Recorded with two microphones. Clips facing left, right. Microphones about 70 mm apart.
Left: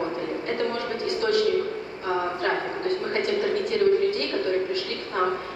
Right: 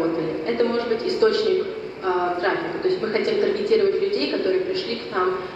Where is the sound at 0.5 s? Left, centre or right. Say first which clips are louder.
Right 9 dB; right.